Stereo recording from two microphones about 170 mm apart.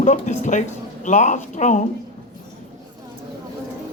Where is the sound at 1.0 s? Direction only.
45° left (ahead or behind).